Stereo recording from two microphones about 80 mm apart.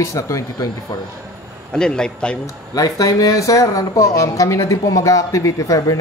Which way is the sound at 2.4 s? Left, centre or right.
Left.